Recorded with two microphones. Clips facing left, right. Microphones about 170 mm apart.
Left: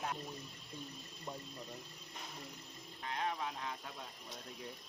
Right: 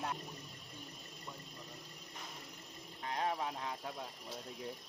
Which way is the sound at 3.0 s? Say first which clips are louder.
Right 2 dB; 35° right (ahead or behind).